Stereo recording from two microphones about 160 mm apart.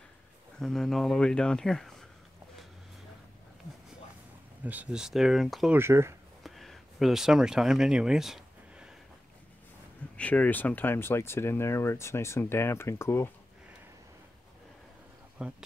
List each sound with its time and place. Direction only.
0.6 s speech: centre (ahead or behind)
4.6 s speech: 5° right (ahead or behind)
5.8 s speech: 15° right (ahead or behind)
6.4 s a sound: centre (ahead or behind)
10.1 s speech: 10° left (ahead or behind)
15.4 s speech: 5° right (ahead or behind)